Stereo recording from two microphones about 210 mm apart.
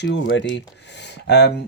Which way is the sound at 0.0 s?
55° left (ahead or behind).